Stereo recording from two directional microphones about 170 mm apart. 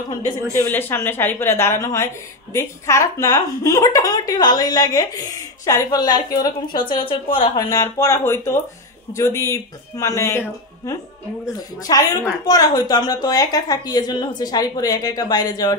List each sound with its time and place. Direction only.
0.6 s a woman's voice: 10° left (ahead or behind)